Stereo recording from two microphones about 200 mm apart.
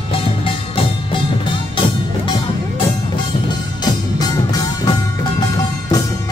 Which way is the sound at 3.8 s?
20° left (ahead or behind).